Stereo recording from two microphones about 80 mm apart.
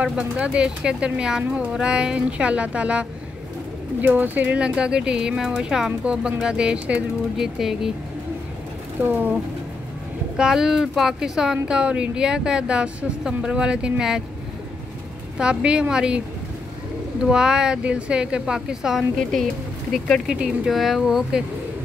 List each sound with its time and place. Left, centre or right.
0.0 s speech: centre
9.0 s speech: centre
10.3 s speech: centre
15.3 s speech: centre
17.2 s speech: centre
19.3 s speech: centre
20.2 s speech: centre